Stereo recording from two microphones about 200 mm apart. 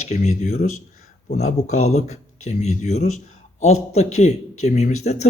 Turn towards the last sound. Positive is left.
turn(degrees=35)  # may be behind; listen again after turning